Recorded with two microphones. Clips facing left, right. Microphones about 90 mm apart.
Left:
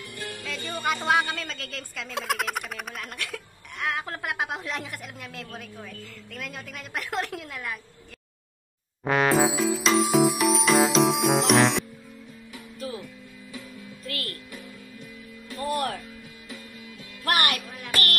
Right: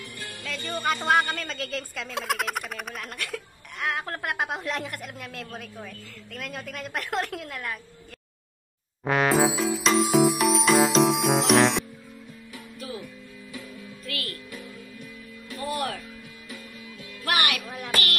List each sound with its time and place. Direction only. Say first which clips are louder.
0.5 s a woman's voice: right 1 dB; centre (ahead or behind)
9.0 s music: even; centre (ahead or behind)
13.0 s music: right 1 dB; 20° left (ahead or behind)
14.0 s music: even; 40° left (ahead or behind)
15.6 s music: left 2 dB; 40° left (ahead or behind)
17.4 s music: even; 40° left (ahead or behind)
17.7 s a sound: right 1 dB; 25° right (ahead or behind)